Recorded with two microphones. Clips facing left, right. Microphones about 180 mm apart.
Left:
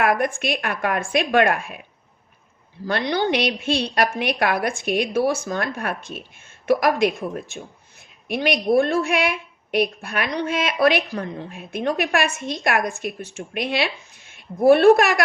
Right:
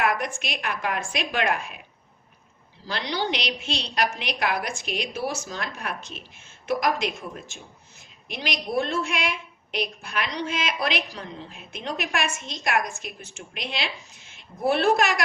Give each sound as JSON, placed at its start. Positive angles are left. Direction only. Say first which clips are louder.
{"t": 0.0, "sound": "a woman's voice", "louder": "left 5 dB", "side_deg": 55}
{"t": 2.8, "sound": "a woman's voice", "louder": "left 7 dB", "side_deg": 50}